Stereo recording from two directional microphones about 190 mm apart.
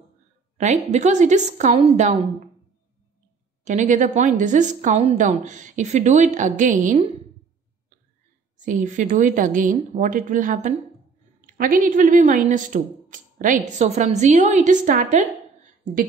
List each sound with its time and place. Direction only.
0.6 s speech: 35° right (ahead or behind)
3.6 s speech: 40° right (ahead or behind)
8.6 s a woman's voice: 40° right (ahead or behind)